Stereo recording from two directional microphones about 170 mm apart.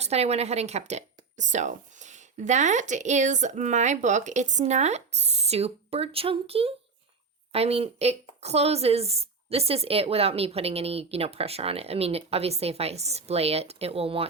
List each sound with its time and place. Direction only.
0.0 s speech: 40° right (ahead or behind)